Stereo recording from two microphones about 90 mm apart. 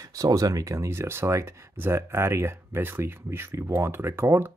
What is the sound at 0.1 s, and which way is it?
Speech, 40° right (ahead or behind).